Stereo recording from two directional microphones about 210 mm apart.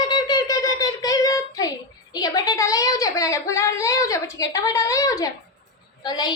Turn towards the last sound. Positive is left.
turn(degrees=20)  # may be behind; listen again after turning